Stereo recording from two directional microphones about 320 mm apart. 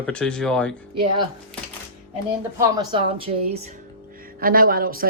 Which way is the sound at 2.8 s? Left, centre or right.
Centre.